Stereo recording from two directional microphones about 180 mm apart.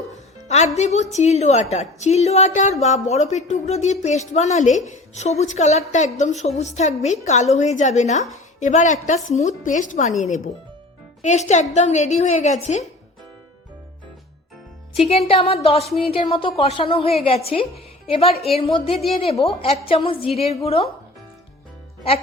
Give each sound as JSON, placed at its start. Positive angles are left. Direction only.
{"t": 0.4, "sound": "a woman's voice", "side_deg": 40}
{"t": 15.0, "sound": "a woman's voice", "side_deg": 35}